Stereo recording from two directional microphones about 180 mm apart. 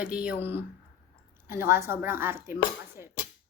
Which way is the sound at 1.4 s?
15° right (ahead or behind).